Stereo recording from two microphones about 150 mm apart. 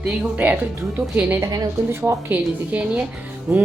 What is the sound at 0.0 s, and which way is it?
A woman's voice, 10° right (ahead or behind).